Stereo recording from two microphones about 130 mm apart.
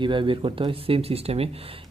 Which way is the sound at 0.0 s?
40° right (ahead or behind).